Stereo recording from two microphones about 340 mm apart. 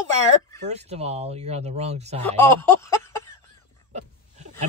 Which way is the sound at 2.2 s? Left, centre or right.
Centre.